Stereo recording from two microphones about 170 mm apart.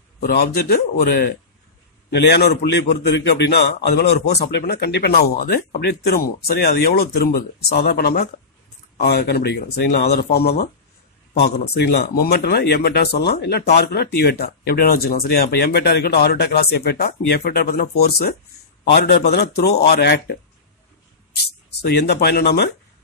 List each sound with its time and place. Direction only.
0.2 s a man's voice: 65° left (ahead or behind)
2.0 s speech: 75° left (ahead or behind)
21.8 s speech: 75° left (ahead or behind)